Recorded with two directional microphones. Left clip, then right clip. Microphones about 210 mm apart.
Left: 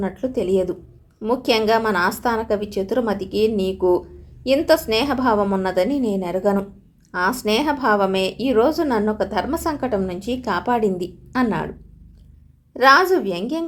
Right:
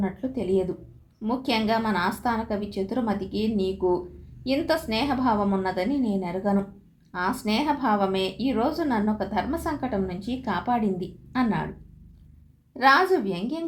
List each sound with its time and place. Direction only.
0.0 s a woman's voice: 45° left (ahead or behind)
12.7 s a woman's voice: 45° left (ahead or behind)